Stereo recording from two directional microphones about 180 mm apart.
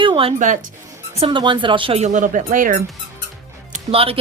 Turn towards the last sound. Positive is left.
turn(degrees=-30)  # may be behind; listen again after turning